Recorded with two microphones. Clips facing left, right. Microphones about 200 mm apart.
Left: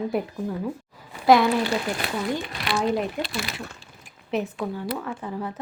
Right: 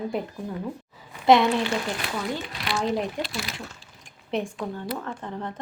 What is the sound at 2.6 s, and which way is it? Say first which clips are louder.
Speech: left 2 dB; 60° left (ahead or behind).